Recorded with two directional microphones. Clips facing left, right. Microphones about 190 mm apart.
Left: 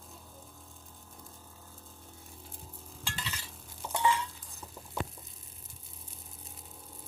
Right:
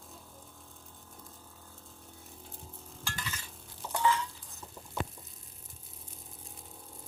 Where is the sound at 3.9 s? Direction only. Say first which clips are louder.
Even; 15° left (ahead or behind).